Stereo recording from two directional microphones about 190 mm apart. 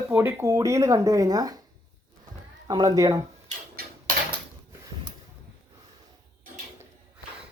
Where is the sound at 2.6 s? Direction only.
20° right (ahead or behind).